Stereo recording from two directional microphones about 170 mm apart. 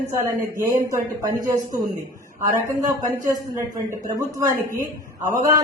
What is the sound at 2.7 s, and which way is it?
A man's voice, 20° right (ahead or behind).